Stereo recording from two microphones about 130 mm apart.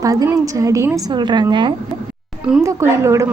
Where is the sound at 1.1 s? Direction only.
35° right (ahead or behind).